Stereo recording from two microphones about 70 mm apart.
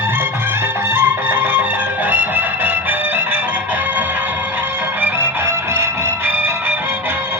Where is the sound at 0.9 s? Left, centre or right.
Right.